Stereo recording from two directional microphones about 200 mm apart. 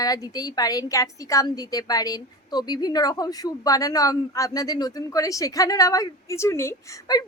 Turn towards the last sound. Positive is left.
turn(degrees=15)  # may be behind; listen again after turning